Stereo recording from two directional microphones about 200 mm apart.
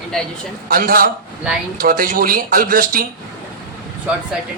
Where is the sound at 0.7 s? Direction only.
45° right (ahead or behind).